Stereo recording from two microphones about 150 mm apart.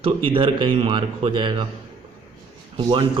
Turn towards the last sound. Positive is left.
turn(degrees=-35)  # may be behind; listen again after turning